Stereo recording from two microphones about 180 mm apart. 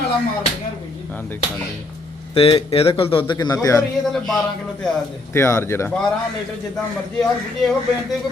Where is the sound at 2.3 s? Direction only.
30° left (ahead or behind).